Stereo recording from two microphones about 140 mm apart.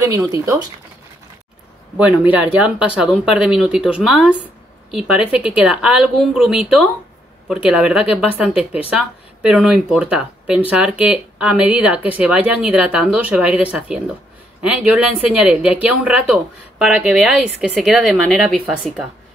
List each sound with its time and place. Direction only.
0.0 s speech: 25° right (ahead or behind)
2.2 s speech: 10° right (ahead or behind)